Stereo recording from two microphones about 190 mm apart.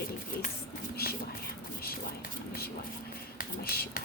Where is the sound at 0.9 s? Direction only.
55° left (ahead or behind).